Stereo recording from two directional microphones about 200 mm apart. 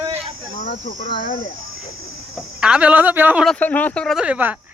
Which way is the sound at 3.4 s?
10° left (ahead or behind).